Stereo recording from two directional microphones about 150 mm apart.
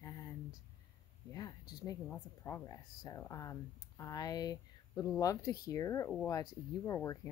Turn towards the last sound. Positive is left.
turn(degrees=20)  # may be behind; listen again after turning